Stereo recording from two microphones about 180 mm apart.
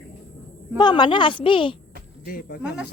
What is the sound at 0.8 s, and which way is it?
Speech, 25° left (ahead or behind).